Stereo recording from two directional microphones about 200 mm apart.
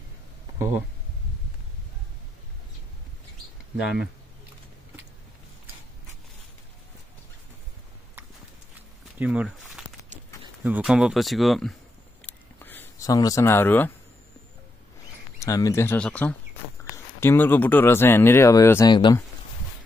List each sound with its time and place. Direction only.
3.7 s speech: 5° right (ahead or behind)
9.2 s speech: 5° right (ahead or behind)
12.3 s a sound: 10° left (ahead or behind)
15.3 s speech: 15° left (ahead or behind)